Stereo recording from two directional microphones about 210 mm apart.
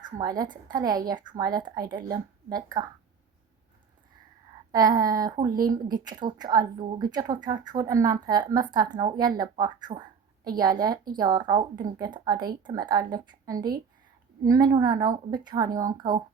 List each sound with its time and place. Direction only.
0.2 s a woman's voice: 20° right (ahead or behind)
4.7 s a woman's voice: 20° right (ahead or behind)